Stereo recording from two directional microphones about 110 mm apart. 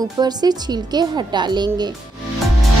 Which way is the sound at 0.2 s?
40° right (ahead or behind).